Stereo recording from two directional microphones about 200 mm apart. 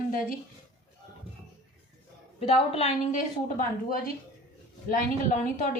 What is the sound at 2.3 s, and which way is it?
Speech, 30° left (ahead or behind).